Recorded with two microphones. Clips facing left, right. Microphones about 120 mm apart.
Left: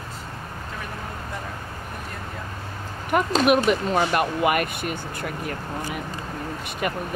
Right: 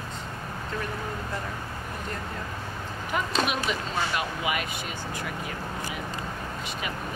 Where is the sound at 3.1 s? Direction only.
55° left (ahead or behind).